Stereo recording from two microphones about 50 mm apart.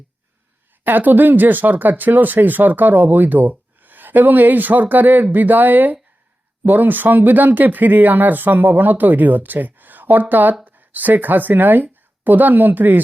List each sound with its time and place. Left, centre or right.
0.9 s speech: right